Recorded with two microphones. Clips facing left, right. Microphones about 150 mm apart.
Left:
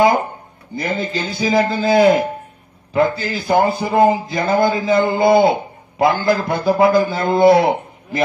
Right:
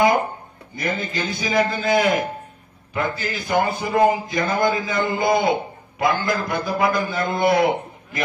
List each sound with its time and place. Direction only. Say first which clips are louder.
0.7 s a man's voice: left 4 dB; 30° left (ahead or behind)